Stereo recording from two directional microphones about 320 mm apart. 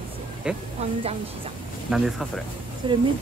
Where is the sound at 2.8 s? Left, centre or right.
Centre.